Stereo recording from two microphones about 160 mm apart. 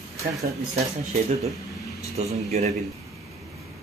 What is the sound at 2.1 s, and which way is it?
Speech, 40° right (ahead or behind).